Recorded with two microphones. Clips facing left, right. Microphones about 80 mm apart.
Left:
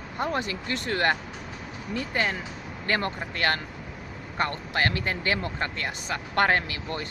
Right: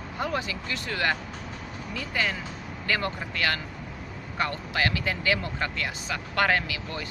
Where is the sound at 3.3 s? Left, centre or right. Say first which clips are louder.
Left 3 dB; left.